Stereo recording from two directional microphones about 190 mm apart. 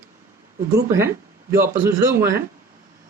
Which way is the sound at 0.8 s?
15° right (ahead or behind).